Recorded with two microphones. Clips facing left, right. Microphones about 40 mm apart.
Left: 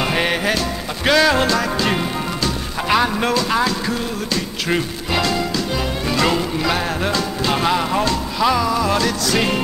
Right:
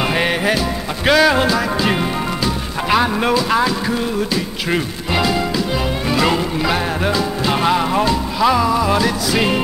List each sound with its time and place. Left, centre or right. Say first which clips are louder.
0.0 s music: right 2 dB; centre